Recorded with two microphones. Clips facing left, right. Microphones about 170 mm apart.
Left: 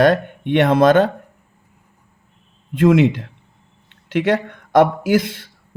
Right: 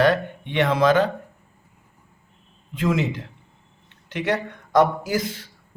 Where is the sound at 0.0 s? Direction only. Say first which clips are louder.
Left 4 dB; 60° left (ahead or behind).